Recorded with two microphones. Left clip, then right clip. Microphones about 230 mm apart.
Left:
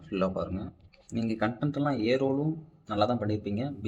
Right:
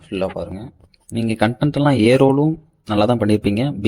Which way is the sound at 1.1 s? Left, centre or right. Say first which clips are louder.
Right 11 dB; right.